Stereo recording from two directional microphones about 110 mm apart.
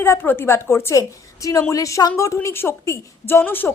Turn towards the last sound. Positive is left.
turn(degrees=20)  # may be behind; listen again after turning